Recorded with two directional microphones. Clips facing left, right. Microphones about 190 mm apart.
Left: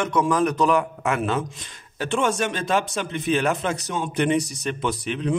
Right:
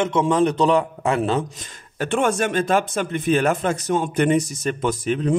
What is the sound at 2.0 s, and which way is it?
A man's voice, 55° right (ahead or behind).